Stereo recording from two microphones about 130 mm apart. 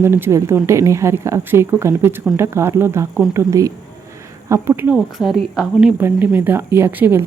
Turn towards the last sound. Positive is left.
turn(degrees=-15)  # may be behind; listen again after turning